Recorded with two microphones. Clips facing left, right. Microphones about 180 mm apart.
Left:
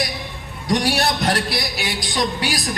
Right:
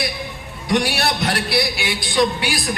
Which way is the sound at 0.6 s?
40° left (ahead or behind).